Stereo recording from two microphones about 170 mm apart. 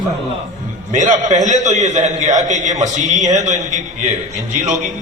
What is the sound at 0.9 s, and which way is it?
A man's voice, 45° right (ahead or behind).